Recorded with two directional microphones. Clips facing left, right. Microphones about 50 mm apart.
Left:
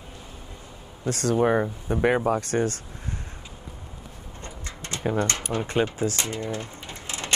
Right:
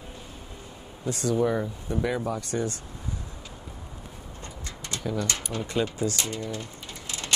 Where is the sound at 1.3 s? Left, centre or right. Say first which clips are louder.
Left 4 dB; left.